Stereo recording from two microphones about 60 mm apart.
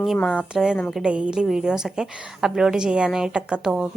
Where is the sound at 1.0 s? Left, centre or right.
Centre.